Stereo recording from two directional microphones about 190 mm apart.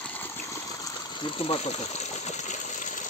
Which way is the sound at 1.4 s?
30° left (ahead or behind).